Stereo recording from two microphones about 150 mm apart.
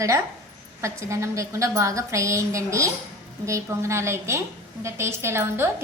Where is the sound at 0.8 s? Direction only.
20° right (ahead or behind).